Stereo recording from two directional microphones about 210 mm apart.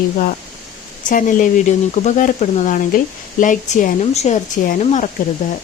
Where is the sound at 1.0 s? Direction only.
40° left (ahead or behind).